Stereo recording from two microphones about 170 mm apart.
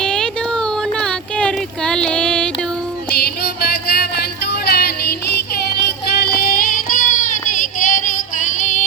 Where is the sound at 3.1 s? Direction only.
70° left (ahead or behind).